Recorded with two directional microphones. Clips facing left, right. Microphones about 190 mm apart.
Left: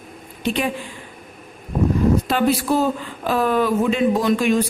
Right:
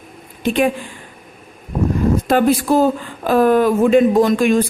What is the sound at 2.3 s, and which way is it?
Speech, 45° right (ahead or behind).